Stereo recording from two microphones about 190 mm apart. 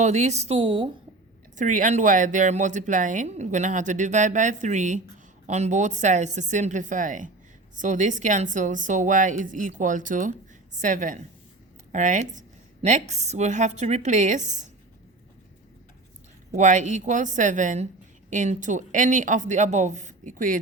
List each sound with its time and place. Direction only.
0.0 s speech: 35° right (ahead or behind)
1.5 s a woman's voice: 40° right (ahead or behind)
16.6 s speech: 40° right (ahead or behind)